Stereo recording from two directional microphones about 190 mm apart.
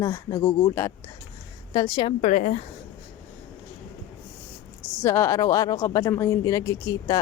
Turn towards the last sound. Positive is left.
turn(degrees=20)  # may be behind; listen again after turning